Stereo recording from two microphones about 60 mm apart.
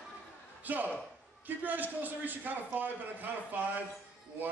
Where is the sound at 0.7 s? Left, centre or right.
Right.